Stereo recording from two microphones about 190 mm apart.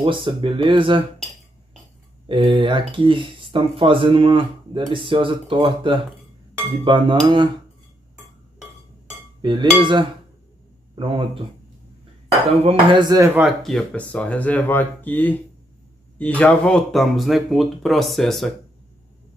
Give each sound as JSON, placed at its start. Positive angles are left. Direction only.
{"t": 0.0, "sound": "speech", "side_deg": -25}
{"t": 2.2, "sound": "speech", "side_deg": -25}
{"t": 9.4, "sound": "dishes", "side_deg": -25}
{"t": 9.8, "sound": "speech", "side_deg": -25}
{"t": 12.6, "sound": "speech", "side_deg": -25}